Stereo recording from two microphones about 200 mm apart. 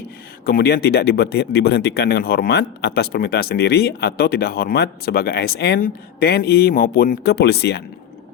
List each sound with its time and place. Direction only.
0.4 s speech: 50° left (ahead or behind)